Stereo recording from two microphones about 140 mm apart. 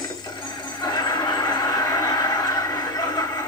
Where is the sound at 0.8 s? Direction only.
30° left (ahead or behind).